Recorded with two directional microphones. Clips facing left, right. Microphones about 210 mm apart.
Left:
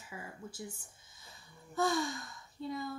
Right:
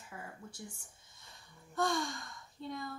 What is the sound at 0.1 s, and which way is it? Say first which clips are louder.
A woman's voice: left 2 dB; centre (ahead or behind).